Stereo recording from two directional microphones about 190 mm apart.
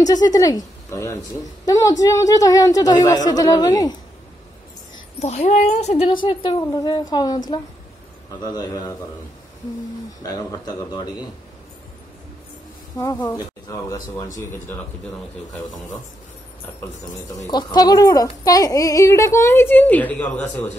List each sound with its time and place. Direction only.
0.0 s a woman's voice: 20° left (ahead or behind)
5.2 s speech: 35° left (ahead or behind)
10.2 s speech: 20° left (ahead or behind)
12.9 s a woman's voice: 20° left (ahead or behind)
17.5 s a woman's voice: 20° left (ahead or behind)